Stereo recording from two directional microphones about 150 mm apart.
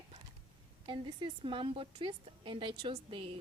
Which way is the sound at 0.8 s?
35° right (ahead or behind).